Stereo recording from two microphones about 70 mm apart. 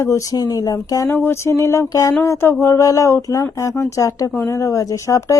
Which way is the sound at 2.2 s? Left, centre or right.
Left.